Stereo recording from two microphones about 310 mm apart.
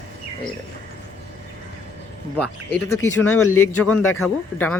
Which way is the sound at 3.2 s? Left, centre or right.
Left.